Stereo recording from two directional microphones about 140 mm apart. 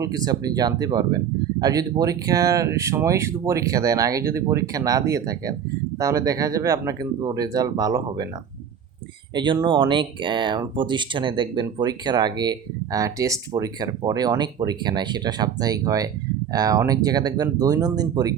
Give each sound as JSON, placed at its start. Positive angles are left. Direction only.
{"t": 0.0, "sound": "speech", "side_deg": -25}
{"t": 9.3, "sound": "speech", "side_deg": -35}